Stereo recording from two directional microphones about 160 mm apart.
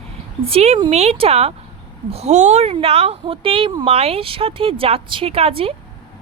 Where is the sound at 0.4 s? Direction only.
40° right (ahead or behind).